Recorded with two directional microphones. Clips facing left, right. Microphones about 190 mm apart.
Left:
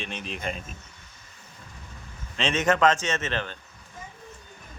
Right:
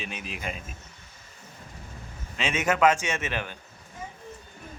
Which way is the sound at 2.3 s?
10° right (ahead or behind).